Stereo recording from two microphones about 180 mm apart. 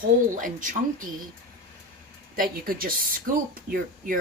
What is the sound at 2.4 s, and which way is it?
Speech, 50° right (ahead or behind).